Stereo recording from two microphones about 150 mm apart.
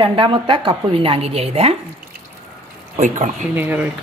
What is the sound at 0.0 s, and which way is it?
Speech, 35° right (ahead or behind).